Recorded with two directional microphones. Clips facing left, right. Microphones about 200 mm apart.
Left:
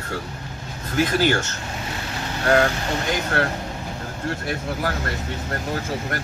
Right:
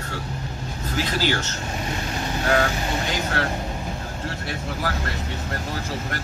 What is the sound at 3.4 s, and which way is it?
Speech, 55° left (ahead or behind).